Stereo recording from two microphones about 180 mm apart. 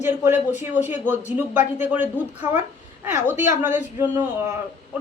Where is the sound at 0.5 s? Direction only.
40° left (ahead or behind).